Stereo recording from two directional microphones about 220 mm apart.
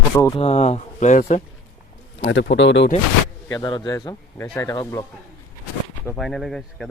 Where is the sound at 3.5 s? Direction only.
20° left (ahead or behind).